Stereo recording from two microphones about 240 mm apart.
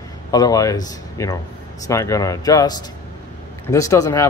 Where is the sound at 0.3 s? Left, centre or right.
Centre.